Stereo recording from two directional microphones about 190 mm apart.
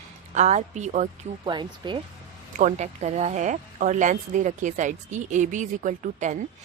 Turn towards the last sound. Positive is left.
turn(degrees=-40)  # may be behind; listen again after turning